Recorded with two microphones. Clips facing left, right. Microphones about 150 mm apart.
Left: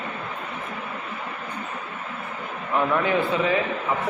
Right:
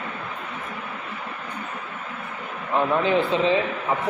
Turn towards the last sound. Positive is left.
turn(degrees=-25)  # may be behind; listen again after turning